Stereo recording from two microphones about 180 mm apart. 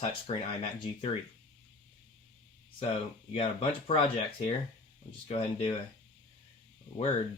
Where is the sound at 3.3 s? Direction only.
30° left (ahead or behind).